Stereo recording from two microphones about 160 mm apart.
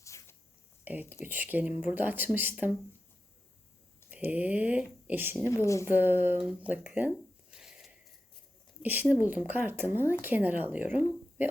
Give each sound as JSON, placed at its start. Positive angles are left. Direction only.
{"t": 0.0, "sound": "a sound", "side_deg": 20}
{"t": 1.2, "sound": "speech", "side_deg": -10}
{"t": 4.1, "sound": "speech", "side_deg": -10}
{"t": 5.6, "sound": "speech", "side_deg": 20}
{"t": 5.9, "sound": "speech", "side_deg": -10}
{"t": 7.5, "sound": "a sound", "side_deg": -5}
{"t": 8.8, "sound": "speech", "side_deg": -10}